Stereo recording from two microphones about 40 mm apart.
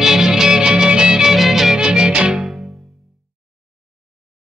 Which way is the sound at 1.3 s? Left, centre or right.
Centre.